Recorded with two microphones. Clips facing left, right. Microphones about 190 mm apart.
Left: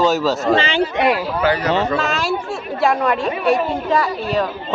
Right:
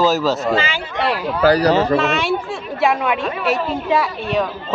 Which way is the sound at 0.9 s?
15° left (ahead or behind).